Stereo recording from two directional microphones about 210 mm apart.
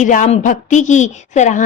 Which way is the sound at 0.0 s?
35° left (ahead or behind).